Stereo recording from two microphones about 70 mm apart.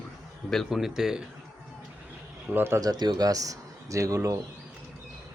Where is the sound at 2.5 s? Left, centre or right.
Right.